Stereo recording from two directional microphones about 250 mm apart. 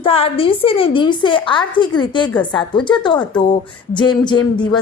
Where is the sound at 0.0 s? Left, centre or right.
Left.